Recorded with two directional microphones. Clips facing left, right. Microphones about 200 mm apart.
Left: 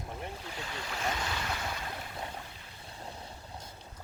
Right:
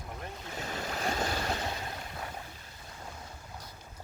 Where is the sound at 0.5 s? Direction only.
40° right (ahead or behind).